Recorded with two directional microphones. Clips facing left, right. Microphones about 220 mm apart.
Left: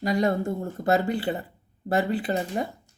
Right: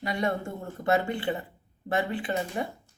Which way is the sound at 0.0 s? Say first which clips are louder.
Left 6 dB; 40° left (ahead or behind).